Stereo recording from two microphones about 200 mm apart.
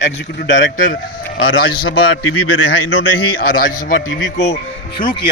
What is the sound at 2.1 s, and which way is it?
A man's voice, 90° left.